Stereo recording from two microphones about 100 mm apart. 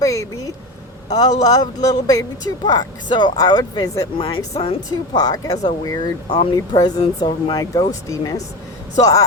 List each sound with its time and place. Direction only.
0.0 s a man's voice: 30° left (ahead or behind)
4.2 s speech: 70° left (ahead or behind)
5.1 s a man's voice: 40° left (ahead or behind)
7.6 s a man's voice: 35° left (ahead or behind)